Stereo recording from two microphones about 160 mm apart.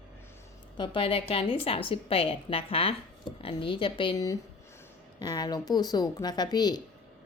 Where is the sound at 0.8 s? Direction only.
35° left (ahead or behind).